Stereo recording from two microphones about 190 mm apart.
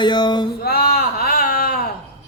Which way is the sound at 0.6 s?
55° left (ahead or behind).